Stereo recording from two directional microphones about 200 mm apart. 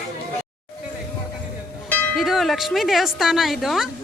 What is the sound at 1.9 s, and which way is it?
Speech, centre (ahead or behind).